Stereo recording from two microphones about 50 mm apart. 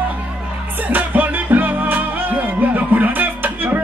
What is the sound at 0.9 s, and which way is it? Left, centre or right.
Music, right.